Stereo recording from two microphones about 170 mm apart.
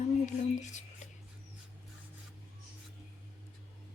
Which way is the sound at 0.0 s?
45° left (ahead or behind).